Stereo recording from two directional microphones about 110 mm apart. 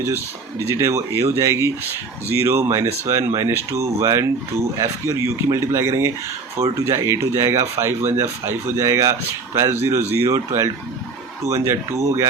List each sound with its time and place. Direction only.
0.7 s speech: 25° right (ahead or behind)